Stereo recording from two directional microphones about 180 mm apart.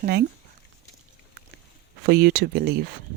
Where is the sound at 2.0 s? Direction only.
60° right (ahead or behind).